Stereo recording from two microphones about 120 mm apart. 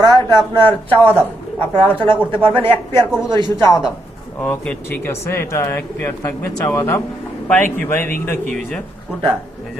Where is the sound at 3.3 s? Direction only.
40° right (ahead or behind).